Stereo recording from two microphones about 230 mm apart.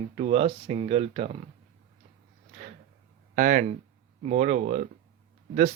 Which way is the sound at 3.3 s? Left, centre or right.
Right.